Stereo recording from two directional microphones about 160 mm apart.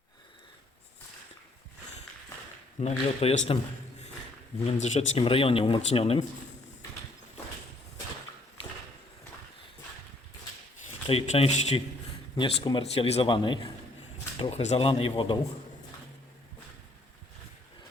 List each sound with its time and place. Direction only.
2.8 s speech: 40° left (ahead or behind)
4.6 s speech: 40° left (ahead or behind)
11.0 s speech: 40° left (ahead or behind)
12.4 s speech: 30° left (ahead or behind)